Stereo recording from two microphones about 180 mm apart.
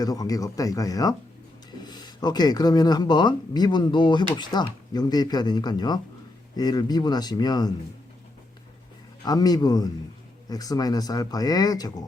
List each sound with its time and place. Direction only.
0.0 s speech: 20° left (ahead or behind)
9.2 s speech: 20° left (ahead or behind)